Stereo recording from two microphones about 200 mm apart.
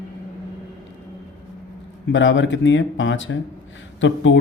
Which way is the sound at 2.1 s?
70° left (ahead or behind).